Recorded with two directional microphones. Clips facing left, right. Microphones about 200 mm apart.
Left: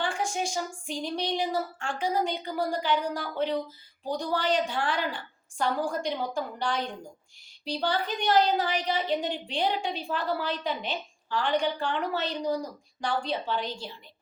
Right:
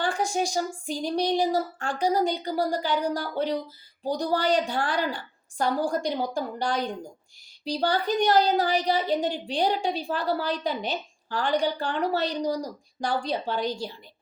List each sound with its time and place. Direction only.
0.0 s a woman's voice: 40° right (ahead or behind)